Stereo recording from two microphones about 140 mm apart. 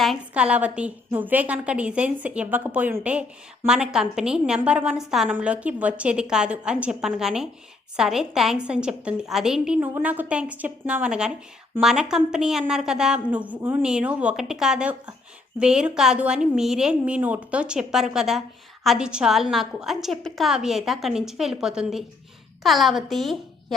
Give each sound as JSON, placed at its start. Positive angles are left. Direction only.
{"t": 0.0, "sound": "a woman's voice", "side_deg": -5}